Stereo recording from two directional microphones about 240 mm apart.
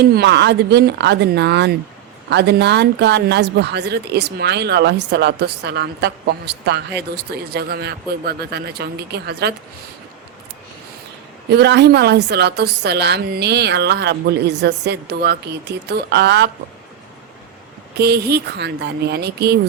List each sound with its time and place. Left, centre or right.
0.0 s speech: right
11.5 s speech: right
17.9 s speech: right